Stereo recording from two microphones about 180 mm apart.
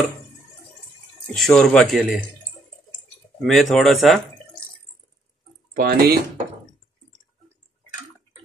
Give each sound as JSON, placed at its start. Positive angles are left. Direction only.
{"t": 1.3, "sound": "speech", "side_deg": 0}
{"t": 3.3, "sound": "speech", "side_deg": 0}
{"t": 5.8, "sound": "speech", "side_deg": -55}